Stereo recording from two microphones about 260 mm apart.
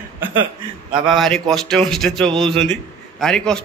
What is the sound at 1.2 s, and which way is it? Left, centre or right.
Speech, centre.